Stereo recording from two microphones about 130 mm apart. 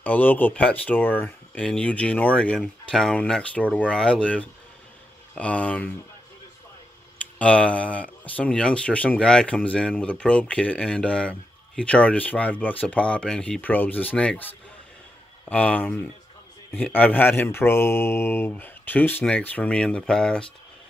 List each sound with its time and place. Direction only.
0.0 s speech: 15° left (ahead or behind)
7.3 s speech: 10° left (ahead or behind)